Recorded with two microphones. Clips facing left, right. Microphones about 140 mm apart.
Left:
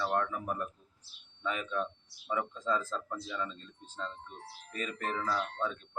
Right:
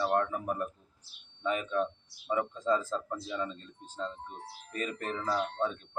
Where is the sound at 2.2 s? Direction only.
35° right (ahead or behind).